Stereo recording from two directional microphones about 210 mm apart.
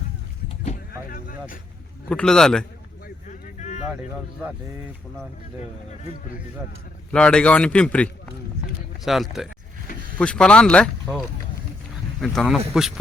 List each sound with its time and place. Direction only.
0.4 s vehicle: 30° left (ahead or behind)
1.0 s vehicle: 45° left (ahead or behind)
2.0 s speech: 5° left (ahead or behind)
3.2 s a sound: 35° left (ahead or behind)
7.1 s speech: 5° left (ahead or behind)
12.2 s speech: centre (ahead or behind)